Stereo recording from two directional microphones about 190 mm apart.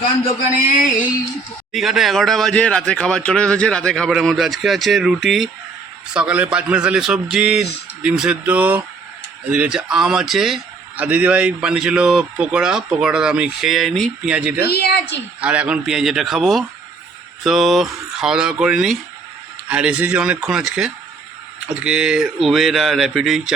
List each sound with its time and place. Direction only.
1.7 s a man's voice: centre (ahead or behind)
14.7 s a woman's voice: 55° left (ahead or behind)
15.4 s a man's voice: 5° right (ahead or behind)